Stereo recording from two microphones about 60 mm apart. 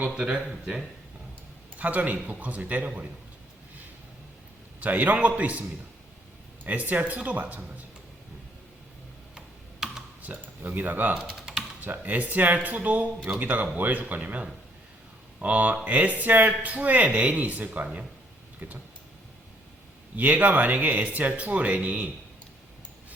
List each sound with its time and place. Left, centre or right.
0.1 s speech: centre
1.8 s speech: right
4.8 s speech: right
6.7 s speech: right
9.8 s computer keyboard: centre
10.2 s speech: right
11.3 s typing: centre
11.8 s speech: right
15.4 s speech: right
20.1 s speech: right